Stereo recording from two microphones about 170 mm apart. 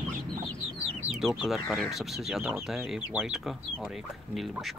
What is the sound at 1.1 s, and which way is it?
Speech, 5° right (ahead or behind).